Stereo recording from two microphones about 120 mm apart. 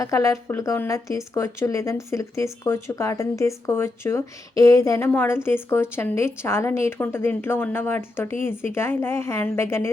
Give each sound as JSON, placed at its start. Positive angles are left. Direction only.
{"t": 0.0, "sound": "speech", "side_deg": 25}